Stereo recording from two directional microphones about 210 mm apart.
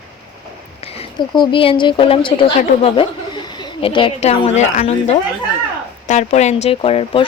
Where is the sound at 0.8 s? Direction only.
30° left (ahead or behind).